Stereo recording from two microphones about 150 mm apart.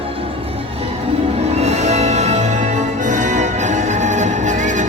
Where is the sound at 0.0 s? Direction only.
40° right (ahead or behind).